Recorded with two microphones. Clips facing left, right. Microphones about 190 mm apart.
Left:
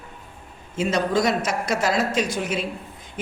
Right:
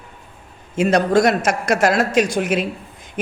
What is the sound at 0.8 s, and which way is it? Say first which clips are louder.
Speech: right 6 dB; 75° right (ahead or behind).